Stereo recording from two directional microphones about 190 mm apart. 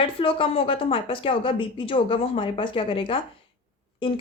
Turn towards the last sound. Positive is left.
turn(degrees=30)  # may be behind; listen again after turning